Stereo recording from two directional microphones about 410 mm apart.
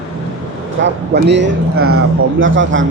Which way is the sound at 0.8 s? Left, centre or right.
Right.